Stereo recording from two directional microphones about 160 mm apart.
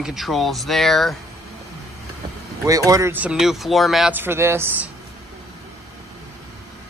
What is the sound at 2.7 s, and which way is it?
Speech, 20° right (ahead or behind).